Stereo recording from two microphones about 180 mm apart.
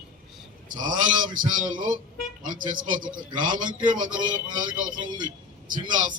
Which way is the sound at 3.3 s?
25° right (ahead or behind).